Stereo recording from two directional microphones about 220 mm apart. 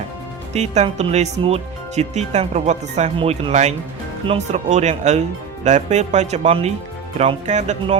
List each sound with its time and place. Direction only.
0.5 s speech: 30° right (ahead or behind)